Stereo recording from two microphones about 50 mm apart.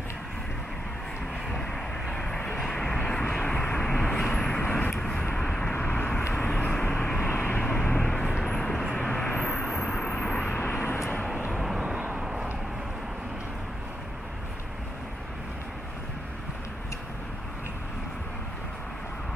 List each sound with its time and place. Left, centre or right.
1.5 s vehicle: centre
5.7 s vehicle: left
6.3 s vehicle: left
7.2 s vehicle: left
8.1 s vehicle: centre
10.7 s vehicle: left
11.5 s vehicle: centre